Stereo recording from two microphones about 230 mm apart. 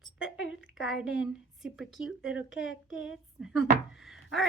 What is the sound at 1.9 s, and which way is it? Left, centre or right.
Speech, left.